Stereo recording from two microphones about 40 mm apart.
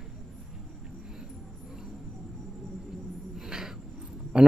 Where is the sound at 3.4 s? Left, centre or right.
Centre.